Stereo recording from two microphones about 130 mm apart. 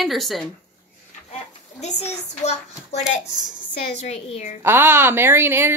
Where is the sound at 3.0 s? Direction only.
5° right (ahead or behind).